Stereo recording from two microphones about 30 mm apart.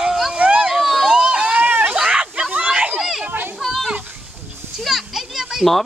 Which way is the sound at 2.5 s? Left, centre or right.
Right.